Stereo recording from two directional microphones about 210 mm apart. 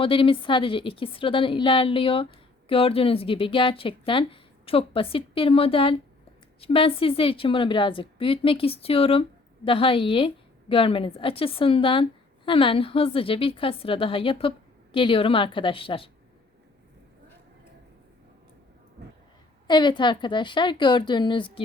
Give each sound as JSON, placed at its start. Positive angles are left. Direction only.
{"t": 0.0, "sound": "a woman's voice", "side_deg": 25}
{"t": 19.6, "sound": "a woman's voice", "side_deg": 20}